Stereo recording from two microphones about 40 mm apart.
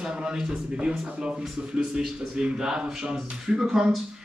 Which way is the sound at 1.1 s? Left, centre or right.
Right.